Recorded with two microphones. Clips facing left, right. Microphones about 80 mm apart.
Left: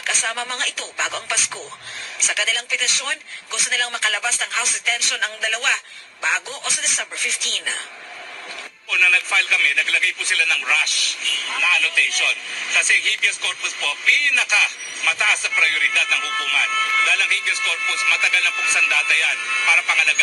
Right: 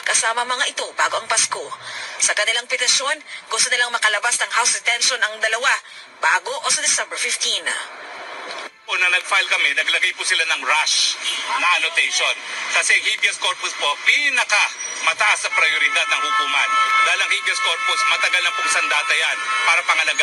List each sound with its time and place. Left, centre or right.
0.0 s a sound: right
0.4 s speech: right
8.9 s speech: right
15.6 s speech: right